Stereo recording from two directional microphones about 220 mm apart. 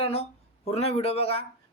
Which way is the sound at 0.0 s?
25° left (ahead or behind).